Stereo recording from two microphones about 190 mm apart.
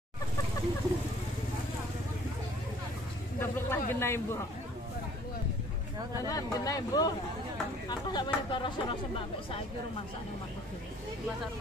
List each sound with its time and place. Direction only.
3.3 s a sound: 10° left (ahead or behind)
3.9 s a man's voice: 15° left (ahead or behind)
6.2 s speech: 20° left (ahead or behind)